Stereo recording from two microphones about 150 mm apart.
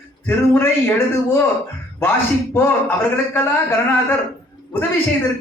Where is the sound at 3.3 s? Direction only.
10° left (ahead or behind).